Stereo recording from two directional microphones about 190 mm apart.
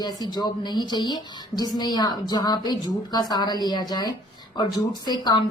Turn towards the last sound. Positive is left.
turn(degrees=20)  # may be behind; listen again after turning